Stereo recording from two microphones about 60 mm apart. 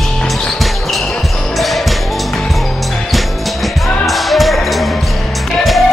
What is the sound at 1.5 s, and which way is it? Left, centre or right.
Music, centre.